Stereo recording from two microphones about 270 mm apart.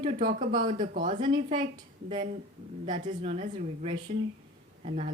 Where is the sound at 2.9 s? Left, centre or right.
Right.